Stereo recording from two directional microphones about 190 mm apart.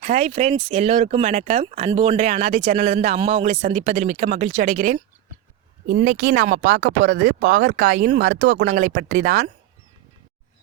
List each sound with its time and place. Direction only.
0.0 s speech: 35° right (ahead or behind)
5.9 s speech: 50° right (ahead or behind)